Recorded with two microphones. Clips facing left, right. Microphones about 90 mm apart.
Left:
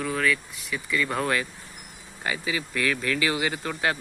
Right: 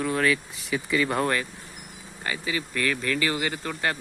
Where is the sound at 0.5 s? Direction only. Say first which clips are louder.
Right 3 dB; 25° right (ahead or behind).